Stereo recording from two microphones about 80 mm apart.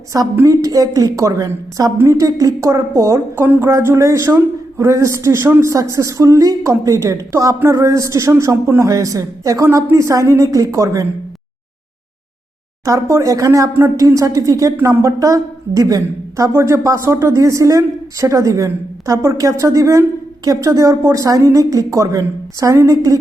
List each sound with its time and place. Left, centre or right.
0.4 s a woman's voice: right
3.3 s a woman's voice: right
12.8 s a woman's voice: right
16.5 s a woman's voice: right